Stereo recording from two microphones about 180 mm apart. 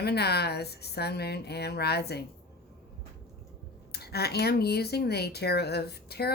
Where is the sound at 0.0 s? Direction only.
65° left (ahead or behind).